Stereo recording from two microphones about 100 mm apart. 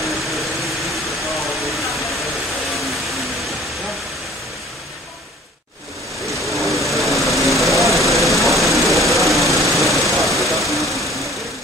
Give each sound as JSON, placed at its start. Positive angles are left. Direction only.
{"t": 0.0, "sound": "vehicle", "side_deg": 0}
{"t": 1.6, "sound": "vehicle", "side_deg": 0}
{"t": 6.4, "sound": "vehicle", "side_deg": 0}